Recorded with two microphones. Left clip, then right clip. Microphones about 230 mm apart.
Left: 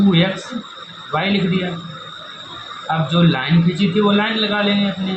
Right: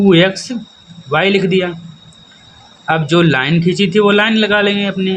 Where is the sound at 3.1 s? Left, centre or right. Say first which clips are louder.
Right 7 dB; right.